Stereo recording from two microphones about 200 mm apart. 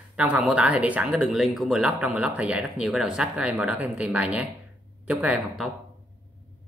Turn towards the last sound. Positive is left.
turn(degrees=0)  # may be behind; listen again after turning